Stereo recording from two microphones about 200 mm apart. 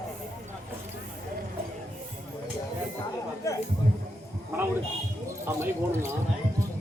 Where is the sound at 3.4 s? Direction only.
15° left (ahead or behind).